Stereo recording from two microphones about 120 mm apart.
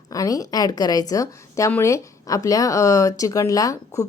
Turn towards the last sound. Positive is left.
turn(degrees=30)  # may be behind; listen again after turning